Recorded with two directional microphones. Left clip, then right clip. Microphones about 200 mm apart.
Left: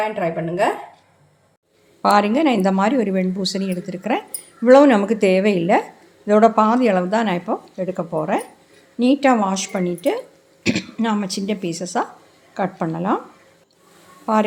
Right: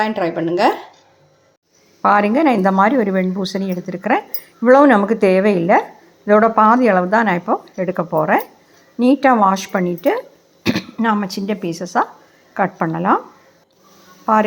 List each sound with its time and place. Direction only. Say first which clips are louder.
0.0 s speech: right 3 dB; 35° right (ahead or behind)
2.0 s speech: right 2 dB; 5° right (ahead or behind)
14.3 s speech: right 4 dB; centre (ahead or behind)